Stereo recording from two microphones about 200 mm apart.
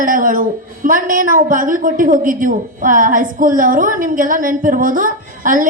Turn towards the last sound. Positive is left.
turn(degrees=-40)  # may be behind; listen again after turning